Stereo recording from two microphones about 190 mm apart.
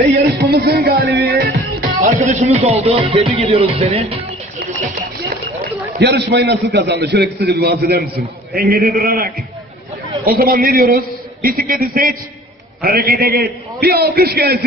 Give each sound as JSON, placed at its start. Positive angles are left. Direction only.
{"t": 0.4, "sound": "music", "side_deg": -55}
{"t": 5.9, "sound": "a man's voice", "side_deg": -65}